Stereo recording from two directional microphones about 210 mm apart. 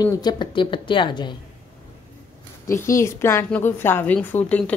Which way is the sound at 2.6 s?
15° left (ahead or behind).